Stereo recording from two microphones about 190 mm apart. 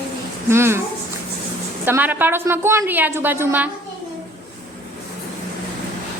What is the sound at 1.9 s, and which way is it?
A woman's voice, 10° right (ahead or behind).